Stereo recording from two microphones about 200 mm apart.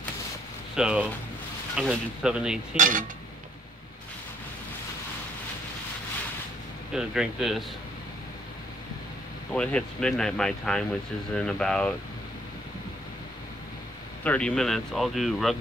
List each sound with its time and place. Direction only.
0.7 s speech: 5° right (ahead or behind)
2.8 s cutlery: 40° right (ahead or behind)
6.9 s speech: 5° right (ahead or behind)
9.5 s speech: 5° left (ahead or behind)
14.2 s speech: 5° left (ahead or behind)